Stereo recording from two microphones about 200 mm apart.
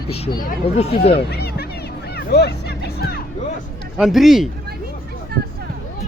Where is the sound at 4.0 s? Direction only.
Centre (ahead or behind).